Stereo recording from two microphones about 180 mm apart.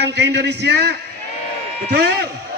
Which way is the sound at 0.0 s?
70° right (ahead or behind).